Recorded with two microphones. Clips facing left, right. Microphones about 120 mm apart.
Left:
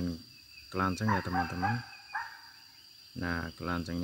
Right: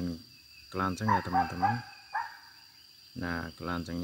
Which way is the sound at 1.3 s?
50° right (ahead or behind).